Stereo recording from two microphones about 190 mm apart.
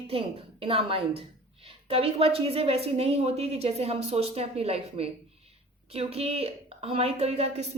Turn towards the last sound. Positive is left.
turn(degrees=-35)  # may be behind; listen again after turning